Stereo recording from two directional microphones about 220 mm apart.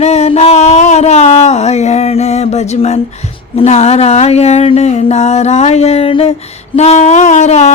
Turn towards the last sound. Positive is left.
turn(degrees=30)  # may be behind; listen again after turning